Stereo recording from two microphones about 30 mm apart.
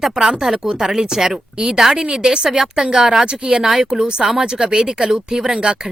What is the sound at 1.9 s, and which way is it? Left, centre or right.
Speech, right.